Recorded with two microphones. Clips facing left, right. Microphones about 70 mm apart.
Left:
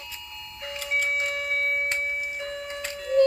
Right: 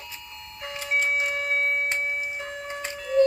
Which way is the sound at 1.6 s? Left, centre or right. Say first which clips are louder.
Right 1 dB; right.